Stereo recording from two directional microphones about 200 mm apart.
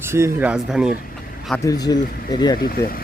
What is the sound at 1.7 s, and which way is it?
Speech, 20° left (ahead or behind).